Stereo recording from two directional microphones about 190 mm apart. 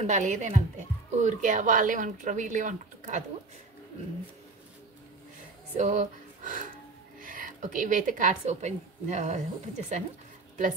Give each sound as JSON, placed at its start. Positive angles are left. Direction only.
{"t": 0.0, "sound": "a woman's voice", "side_deg": -40}
{"t": 5.8, "sound": "a woman's voice", "side_deg": -40}